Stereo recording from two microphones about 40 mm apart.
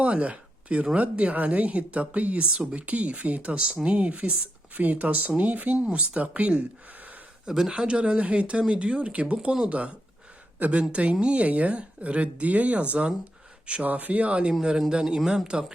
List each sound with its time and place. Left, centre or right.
0.0 s a sound: right
1.1 s speech: right
2.4 s speech: right
3.5 s speech: right
3.8 s speech: right
5.7 s speech: right
7.4 s speech: centre
14.8 s a man's voice: centre